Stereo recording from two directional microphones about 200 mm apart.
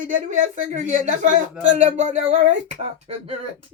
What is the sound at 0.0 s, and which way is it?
Speech, 40° right (ahead or behind).